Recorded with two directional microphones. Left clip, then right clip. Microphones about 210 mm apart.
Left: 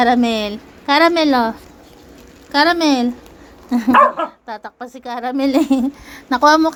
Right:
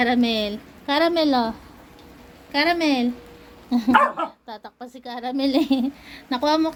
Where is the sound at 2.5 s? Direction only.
20° left (ahead or behind).